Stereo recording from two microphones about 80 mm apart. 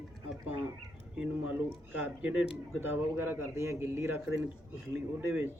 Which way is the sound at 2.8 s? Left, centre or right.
Right.